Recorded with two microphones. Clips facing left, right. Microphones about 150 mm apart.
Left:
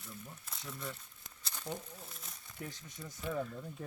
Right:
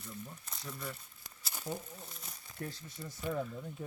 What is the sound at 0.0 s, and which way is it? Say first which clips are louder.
Speech: right 3 dB; centre (ahead or behind).